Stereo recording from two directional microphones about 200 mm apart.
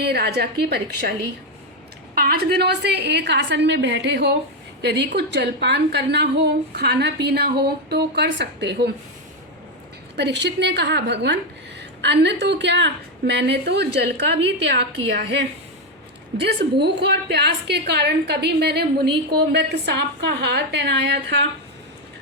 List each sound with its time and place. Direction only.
0.0 s a woman's voice: 55° right (ahead or behind)
2.1 s a woman's voice: 50° right (ahead or behind)
10.2 s a woman's voice: 60° right (ahead or behind)
16.4 s a woman's voice: 55° right (ahead or behind)